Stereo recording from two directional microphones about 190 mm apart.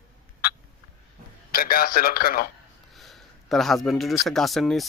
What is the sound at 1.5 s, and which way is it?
Speech, 50° left (ahead or behind).